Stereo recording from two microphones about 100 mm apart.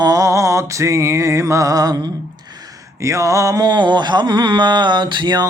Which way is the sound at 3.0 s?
30° right (ahead or behind).